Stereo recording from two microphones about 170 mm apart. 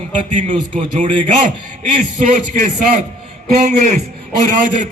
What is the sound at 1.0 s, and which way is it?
A man's voice, 50° right (ahead or behind).